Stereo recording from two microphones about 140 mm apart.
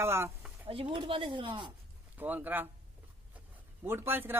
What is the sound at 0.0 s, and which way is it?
Speech, 20° right (ahead or behind).